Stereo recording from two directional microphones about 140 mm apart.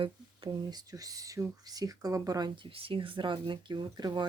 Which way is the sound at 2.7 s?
40° right (ahead or behind).